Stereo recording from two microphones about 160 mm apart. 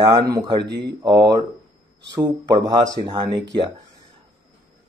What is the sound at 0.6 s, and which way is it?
Speech, 90° right.